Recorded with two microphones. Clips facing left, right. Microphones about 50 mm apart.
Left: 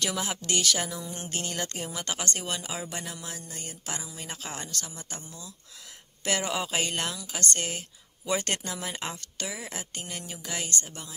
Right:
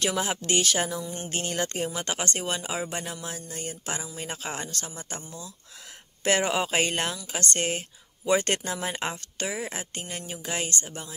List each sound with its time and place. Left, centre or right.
0.0 s speech: right